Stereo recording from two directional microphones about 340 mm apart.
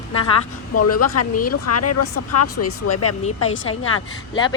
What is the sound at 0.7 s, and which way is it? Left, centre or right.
A woman's voice, left.